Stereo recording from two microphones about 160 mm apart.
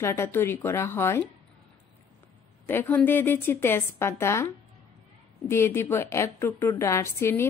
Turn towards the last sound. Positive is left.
turn(degrees=15)  # may be behind; listen again after turning